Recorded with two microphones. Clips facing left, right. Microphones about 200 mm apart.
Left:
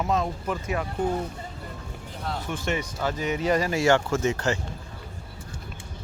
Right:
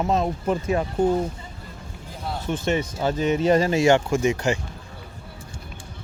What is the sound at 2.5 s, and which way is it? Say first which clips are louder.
Speech: right 7 dB; 25° right (ahead or behind).